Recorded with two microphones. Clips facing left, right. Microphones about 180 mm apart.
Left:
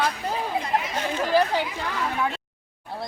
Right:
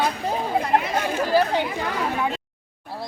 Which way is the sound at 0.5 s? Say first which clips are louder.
Right 8 dB; 55° right (ahead or behind).